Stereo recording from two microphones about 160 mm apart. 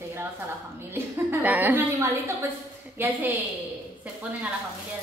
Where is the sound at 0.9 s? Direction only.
15° right (ahead or behind).